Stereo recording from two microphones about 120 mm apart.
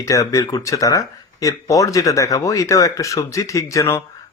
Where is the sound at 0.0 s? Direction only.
30° left (ahead or behind).